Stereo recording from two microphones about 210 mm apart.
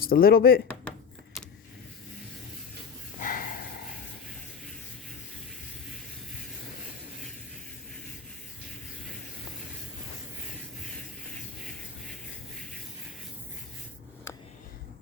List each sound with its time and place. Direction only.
0.0 s speech: 45° left (ahead or behind)
0.7 s keys jangling: 10° left (ahead or behind)
3.2 s snort: 40° left (ahead or behind)